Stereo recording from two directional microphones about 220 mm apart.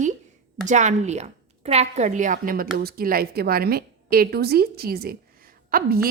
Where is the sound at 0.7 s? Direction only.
35° right (ahead or behind).